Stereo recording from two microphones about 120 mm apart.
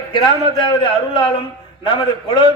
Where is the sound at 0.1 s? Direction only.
40° left (ahead or behind).